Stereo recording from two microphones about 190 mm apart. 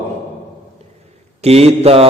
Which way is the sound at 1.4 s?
30° right (ahead or behind).